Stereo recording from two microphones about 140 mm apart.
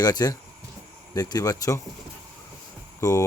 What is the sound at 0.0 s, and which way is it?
Speech, 25° left (ahead or behind).